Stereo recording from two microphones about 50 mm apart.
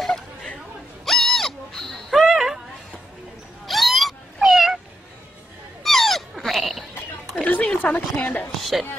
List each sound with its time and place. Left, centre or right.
1.0 s owl: centre
1.9 s a sound: centre
3.6 s cat: centre
5.9 s dog: centre
7.4 s a sound: left
8.2 s a woman's voice: left
8.5 s a woman's voice: centre